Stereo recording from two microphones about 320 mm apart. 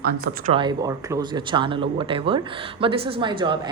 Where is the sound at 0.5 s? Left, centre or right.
Centre.